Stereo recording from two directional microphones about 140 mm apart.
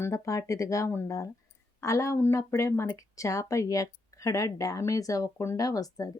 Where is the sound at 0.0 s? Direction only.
20° left (ahead or behind).